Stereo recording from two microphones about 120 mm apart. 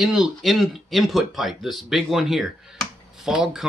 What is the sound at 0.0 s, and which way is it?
Speech, 5° right (ahead or behind).